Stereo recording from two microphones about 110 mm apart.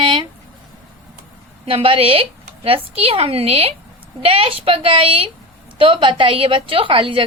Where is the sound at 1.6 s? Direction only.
55° right (ahead or behind).